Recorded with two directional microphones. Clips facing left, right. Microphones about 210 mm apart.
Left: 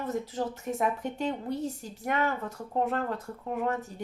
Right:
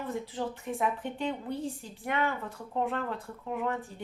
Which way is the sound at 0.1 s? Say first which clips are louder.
Left 3 dB; 40° left (ahead or behind).